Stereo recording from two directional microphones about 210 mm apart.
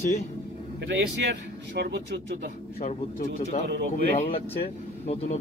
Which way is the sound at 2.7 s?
35° left (ahead or behind).